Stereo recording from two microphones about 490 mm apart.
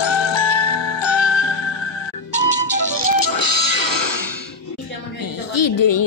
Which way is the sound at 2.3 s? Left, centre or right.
Left.